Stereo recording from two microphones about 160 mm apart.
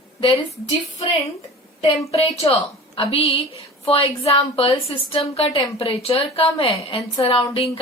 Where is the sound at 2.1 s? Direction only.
40° left (ahead or behind).